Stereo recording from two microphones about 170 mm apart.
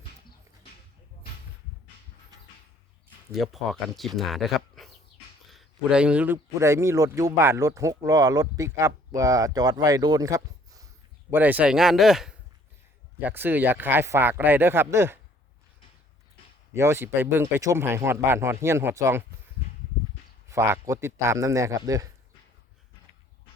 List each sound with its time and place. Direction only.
3.3 s a man's voice: centre (ahead or behind)
16.7 s speech: 15° right (ahead or behind)
20.5 s a man's voice: 15° right (ahead or behind)